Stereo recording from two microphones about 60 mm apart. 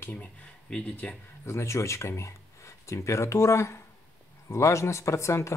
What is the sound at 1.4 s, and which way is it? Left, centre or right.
Speech, left.